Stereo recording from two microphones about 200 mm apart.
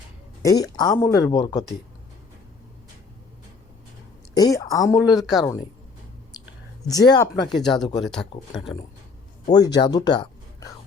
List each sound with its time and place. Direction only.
0.4 s speech: 20° left (ahead or behind)
4.4 s speech: 20° left (ahead or behind)
6.8 s speech: 20° left (ahead or behind)
7.4 s speech: centre (ahead or behind)
7.8 s speech: 20° left (ahead or behind)
8.0 s speech: centre (ahead or behind)
9.5 s speech: 20° left (ahead or behind)